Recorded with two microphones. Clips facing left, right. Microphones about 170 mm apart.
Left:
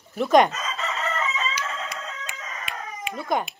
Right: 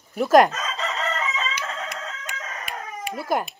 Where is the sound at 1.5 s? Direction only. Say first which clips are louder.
Even; 50° right (ahead or behind).